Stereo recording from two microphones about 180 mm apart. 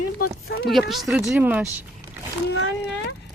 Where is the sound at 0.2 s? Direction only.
55° left (ahead or behind).